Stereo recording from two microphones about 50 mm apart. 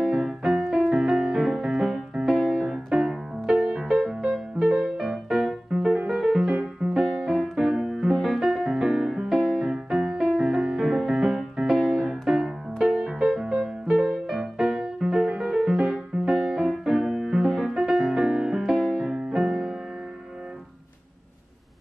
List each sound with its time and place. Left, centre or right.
0.1 s music: centre